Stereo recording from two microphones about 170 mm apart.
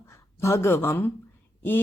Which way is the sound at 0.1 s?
15° left (ahead or behind).